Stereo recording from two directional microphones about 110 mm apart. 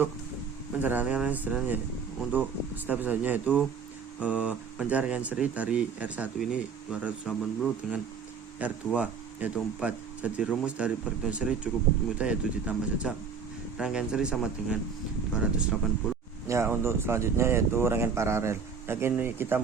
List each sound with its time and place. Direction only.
0.8 s speech: 15° right (ahead or behind)
8.6 s speech: 15° right (ahead or behind)
16.5 s speech: 25° right (ahead or behind)